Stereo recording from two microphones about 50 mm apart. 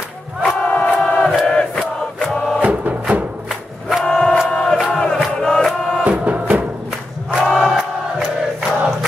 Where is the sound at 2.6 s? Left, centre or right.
Right.